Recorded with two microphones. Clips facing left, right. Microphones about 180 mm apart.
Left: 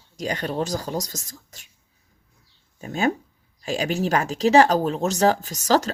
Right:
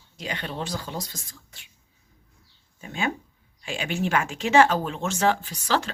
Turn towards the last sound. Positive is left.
turn(degrees=40)  # may be behind; listen again after turning